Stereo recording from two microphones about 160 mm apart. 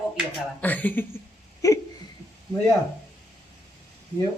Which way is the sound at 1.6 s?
20° left (ahead or behind).